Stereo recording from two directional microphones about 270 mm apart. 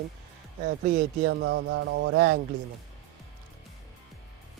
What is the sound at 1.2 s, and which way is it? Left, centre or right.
Speech, right.